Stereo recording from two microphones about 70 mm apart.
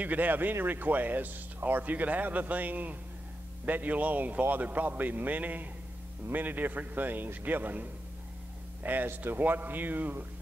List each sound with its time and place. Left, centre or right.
0.0 s speech: right